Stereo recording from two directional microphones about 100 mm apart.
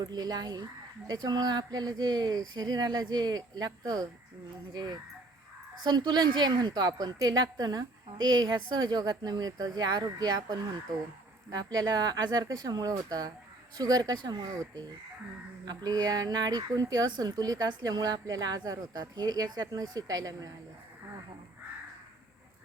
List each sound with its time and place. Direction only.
0.0 s a woman's voice: 40° right (ahead or behind)